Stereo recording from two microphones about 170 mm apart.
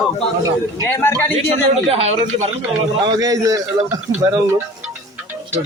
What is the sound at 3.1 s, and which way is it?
A man's voice, 20° right (ahead or behind).